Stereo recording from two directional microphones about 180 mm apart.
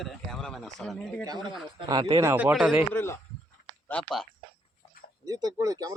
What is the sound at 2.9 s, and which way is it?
Speech, 15° left (ahead or behind).